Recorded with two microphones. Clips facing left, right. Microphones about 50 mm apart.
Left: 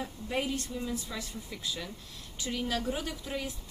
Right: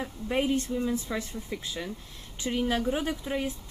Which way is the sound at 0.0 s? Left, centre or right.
Right.